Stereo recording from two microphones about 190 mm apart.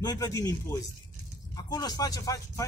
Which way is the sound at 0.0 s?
20° left (ahead or behind).